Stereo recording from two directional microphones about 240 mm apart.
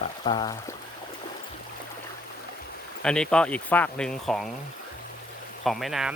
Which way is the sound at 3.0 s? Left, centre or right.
Centre.